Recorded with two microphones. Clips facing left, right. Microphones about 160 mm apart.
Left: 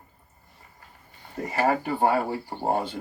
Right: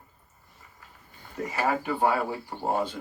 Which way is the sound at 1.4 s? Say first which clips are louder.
Left 3 dB; 50° left (ahead or behind).